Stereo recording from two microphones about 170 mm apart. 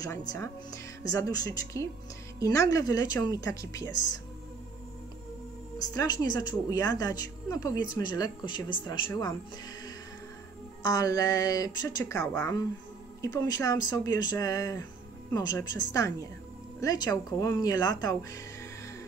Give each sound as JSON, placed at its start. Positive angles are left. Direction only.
{"t": 0.3, "sound": "a woman's voice", "side_deg": 20}
{"t": 5.9, "sound": "a woman's voice", "side_deg": 25}
{"t": 10.8, "sound": "a woman's voice", "side_deg": 20}